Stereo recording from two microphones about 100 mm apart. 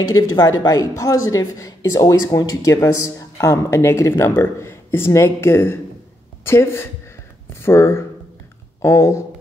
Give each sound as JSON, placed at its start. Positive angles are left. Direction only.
{"t": 0.0, "sound": "a woman's voice", "side_deg": 45}